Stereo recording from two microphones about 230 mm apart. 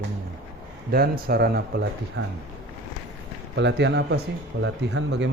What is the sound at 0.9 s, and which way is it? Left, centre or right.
Speech, right.